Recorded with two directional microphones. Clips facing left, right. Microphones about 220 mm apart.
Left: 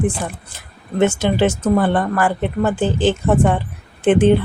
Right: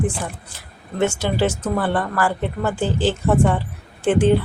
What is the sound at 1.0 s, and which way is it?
A woman's voice, 20° left (ahead or behind).